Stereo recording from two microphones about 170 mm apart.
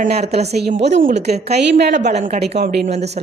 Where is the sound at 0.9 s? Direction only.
45° right (ahead or behind).